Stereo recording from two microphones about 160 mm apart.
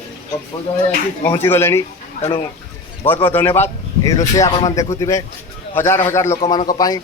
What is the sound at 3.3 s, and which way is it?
A man's voice, 15° left (ahead or behind).